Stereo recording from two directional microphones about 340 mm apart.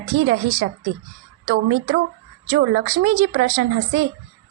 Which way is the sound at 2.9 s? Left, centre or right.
Right.